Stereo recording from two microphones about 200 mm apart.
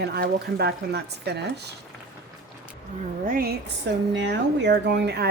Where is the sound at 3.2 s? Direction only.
50° right (ahead or behind).